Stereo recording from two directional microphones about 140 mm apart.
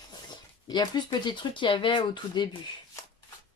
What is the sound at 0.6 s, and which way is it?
Speech, 30° left (ahead or behind).